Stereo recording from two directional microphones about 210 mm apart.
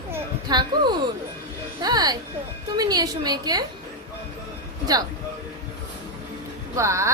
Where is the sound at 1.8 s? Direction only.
20° right (ahead or behind).